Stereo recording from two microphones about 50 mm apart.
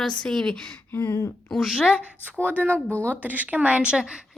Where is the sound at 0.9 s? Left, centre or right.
Left.